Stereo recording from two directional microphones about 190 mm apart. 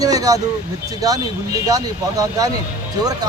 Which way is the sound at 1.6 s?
20° right (ahead or behind).